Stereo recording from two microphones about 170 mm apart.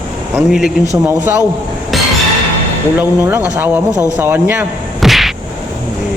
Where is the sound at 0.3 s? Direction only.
Centre (ahead or behind).